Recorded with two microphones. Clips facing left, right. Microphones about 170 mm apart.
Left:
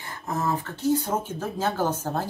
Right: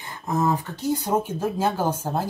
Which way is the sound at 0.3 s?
15° right (ahead or behind).